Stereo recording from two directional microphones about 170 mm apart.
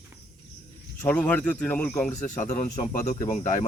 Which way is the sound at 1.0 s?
10° left (ahead or behind).